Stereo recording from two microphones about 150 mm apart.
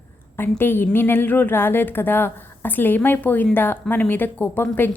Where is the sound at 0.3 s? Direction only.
15° left (ahead or behind).